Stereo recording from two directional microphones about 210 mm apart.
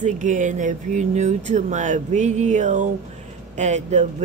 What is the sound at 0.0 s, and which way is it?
Speech, 35° right (ahead or behind).